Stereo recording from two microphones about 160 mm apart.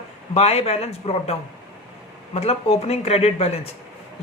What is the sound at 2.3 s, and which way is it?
Speech, 40° left (ahead or behind).